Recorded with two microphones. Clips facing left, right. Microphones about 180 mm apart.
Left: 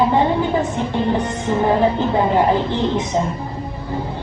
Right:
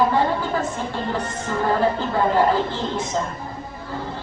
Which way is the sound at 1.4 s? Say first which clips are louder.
Left 4 dB; 20° left (ahead or behind).